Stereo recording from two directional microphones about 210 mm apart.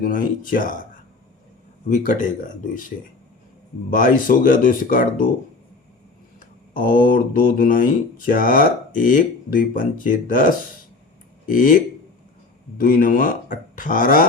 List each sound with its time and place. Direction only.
0.0 s speech: 40° left (ahead or behind)
1.9 s speech: 40° left (ahead or behind)
6.4 s speech: 40° left (ahead or behind)